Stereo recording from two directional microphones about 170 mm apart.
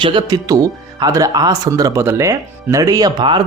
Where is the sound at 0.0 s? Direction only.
30° right (ahead or behind).